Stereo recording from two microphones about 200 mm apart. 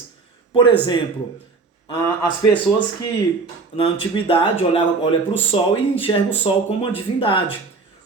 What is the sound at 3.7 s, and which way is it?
Speech, 25° left (ahead or behind).